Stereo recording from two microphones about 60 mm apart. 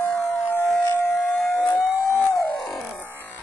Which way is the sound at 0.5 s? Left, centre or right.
Left.